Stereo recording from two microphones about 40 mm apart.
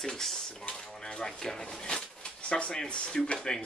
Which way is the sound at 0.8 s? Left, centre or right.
Left.